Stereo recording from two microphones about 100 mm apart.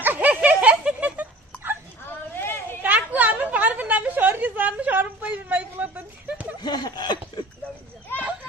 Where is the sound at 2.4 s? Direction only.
20° left (ahead or behind).